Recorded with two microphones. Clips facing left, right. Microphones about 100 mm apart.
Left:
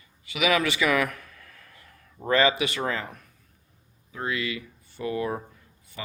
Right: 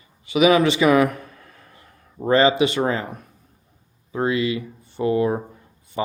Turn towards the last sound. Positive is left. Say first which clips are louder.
# right 8 dB
turn(degrees=-30)  # may be behind; listen again after turning